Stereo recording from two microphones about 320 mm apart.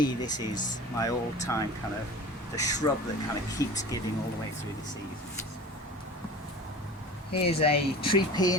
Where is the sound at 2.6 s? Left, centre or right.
Centre.